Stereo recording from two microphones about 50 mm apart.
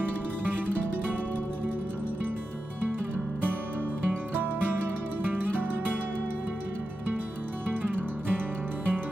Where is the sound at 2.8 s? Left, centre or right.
Right.